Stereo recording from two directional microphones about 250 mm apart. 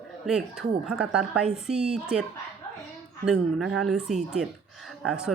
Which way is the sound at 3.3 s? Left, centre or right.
Centre.